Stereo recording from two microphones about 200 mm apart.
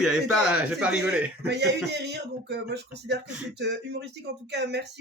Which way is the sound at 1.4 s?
55° right (ahead or behind).